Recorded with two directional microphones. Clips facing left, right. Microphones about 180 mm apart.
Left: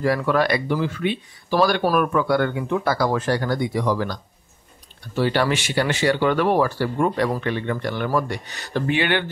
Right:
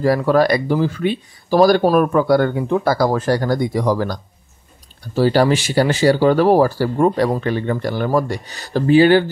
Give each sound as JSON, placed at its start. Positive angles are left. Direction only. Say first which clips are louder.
{"t": 0.0, "sound": "speech", "louder": "right 5 dB", "side_deg": -35}